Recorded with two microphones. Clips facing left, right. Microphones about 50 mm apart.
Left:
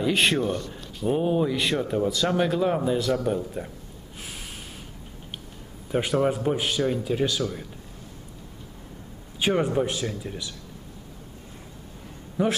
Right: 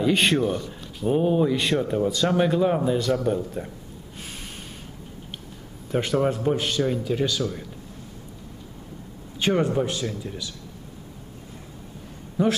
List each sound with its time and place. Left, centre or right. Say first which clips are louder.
0.0 s a man's voice: right 2 dB; centre
5.9 s a man's voice: even; centre
9.4 s a man's voice: right 1 dB; centre
12.4 s a man's voice: right 2 dB; left